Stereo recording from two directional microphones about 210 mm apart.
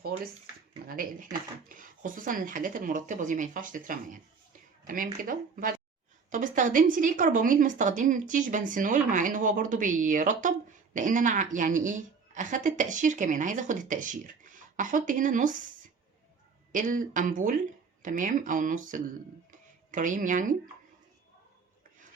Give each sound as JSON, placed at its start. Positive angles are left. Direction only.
{"t": 0.9, "sound": "speech", "side_deg": -40}
{"t": 16.7, "sound": "speech", "side_deg": -40}
{"t": 19.5, "sound": "a sound", "side_deg": -40}